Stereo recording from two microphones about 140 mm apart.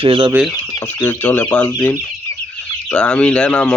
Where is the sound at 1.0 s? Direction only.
15° left (ahead or behind).